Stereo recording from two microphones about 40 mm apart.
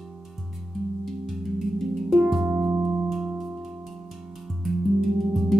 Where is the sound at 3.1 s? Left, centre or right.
Centre.